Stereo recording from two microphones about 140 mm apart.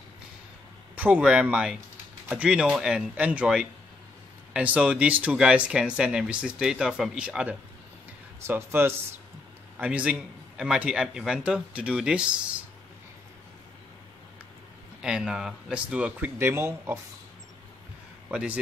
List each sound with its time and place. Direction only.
0.9 s speech: 10° right (ahead or behind)
15.0 s speech: 5° right (ahead or behind)
18.3 s speech: 10° right (ahead or behind)